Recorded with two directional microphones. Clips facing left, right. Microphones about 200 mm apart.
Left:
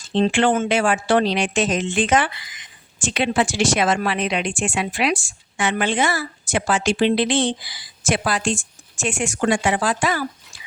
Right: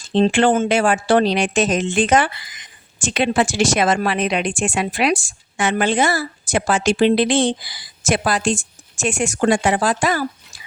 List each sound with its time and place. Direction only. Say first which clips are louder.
0.1 s speech: right 3 dB; 40° right (ahead or behind)